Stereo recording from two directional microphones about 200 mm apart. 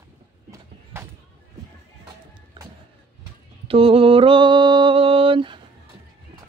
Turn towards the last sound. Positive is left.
turn(degrees=-25)  # may be behind; listen again after turning